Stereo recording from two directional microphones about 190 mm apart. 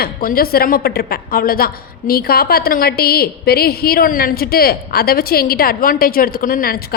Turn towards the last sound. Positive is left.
turn(degrees=50)  # may be behind; listen again after turning